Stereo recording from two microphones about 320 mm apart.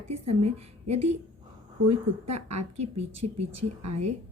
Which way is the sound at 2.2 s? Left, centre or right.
Right.